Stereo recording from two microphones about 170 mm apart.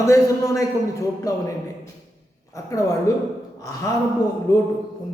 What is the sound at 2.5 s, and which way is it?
A woman's voice, 20° left (ahead or behind).